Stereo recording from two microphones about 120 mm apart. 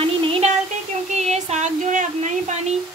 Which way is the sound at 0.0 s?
50° right (ahead or behind).